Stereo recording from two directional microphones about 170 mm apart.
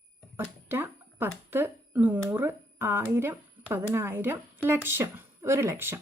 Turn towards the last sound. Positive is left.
turn(degrees=-15)  # may be behind; listen again after turning